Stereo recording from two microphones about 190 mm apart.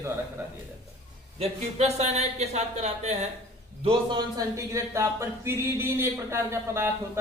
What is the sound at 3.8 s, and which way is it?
Speech, 20° right (ahead or behind).